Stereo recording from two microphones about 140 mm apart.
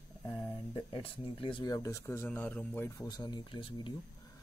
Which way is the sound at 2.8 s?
20° left (ahead or behind).